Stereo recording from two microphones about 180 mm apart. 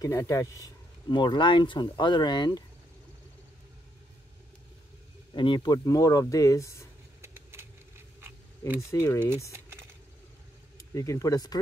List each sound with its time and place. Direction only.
0.0 s speech: 20° left (ahead or behind)
5.3 s speech: 25° left (ahead or behind)
7.2 s vehicle: 15° right (ahead or behind)
8.2 s a sound: 10° right (ahead or behind)
8.9 s speech: 15° left (ahead or behind)
9.5 s typing: 15° right (ahead or behind)
10.8 s speech: 15° left (ahead or behind)